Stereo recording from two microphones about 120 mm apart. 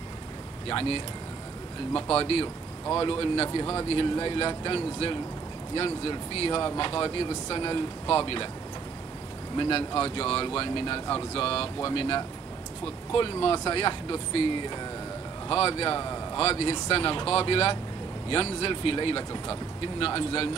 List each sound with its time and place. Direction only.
0.7 s speech: 50° left (ahead or behind)
9.6 s speech: 50° left (ahead or behind)
15.5 s speech: 50° left (ahead or behind)